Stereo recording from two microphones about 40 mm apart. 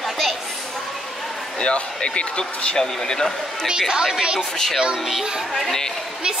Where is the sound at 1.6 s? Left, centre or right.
Left.